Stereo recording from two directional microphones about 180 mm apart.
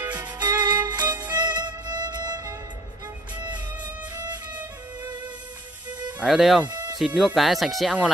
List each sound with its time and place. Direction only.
0.1 s music: 20° right (ahead or behind)
1.3 s violin: 25° right (ahead or behind)
3.3 s music: 25° right (ahead or behind)
6.1 s speech: centre (ahead or behind)
6.7 s music: 25° right (ahead or behind)
7.0 s speech: 5° right (ahead or behind)